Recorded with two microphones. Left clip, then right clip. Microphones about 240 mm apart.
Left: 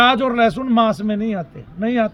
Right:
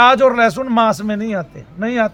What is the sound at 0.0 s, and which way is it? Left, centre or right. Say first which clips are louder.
Speech: right 4 dB; centre.